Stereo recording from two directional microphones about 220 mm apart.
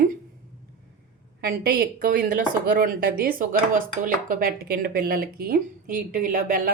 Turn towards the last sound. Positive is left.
turn(degrees=-40)  # may be behind; listen again after turning